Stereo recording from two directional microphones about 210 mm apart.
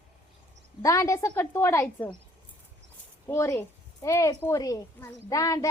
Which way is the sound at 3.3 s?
15° left (ahead or behind).